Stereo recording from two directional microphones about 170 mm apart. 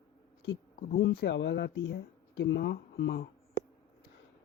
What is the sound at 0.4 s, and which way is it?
Speech, 90° left.